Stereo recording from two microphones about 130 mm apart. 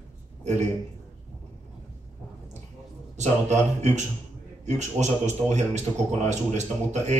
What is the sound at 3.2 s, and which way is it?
A man's voice, 65° right (ahead or behind).